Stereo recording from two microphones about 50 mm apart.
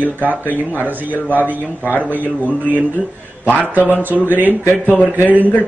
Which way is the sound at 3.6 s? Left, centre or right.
Right.